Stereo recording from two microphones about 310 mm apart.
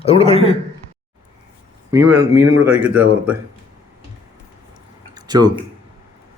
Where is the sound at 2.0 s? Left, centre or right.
Right.